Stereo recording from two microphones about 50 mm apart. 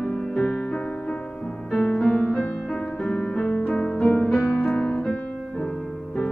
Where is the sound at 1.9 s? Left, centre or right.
Left.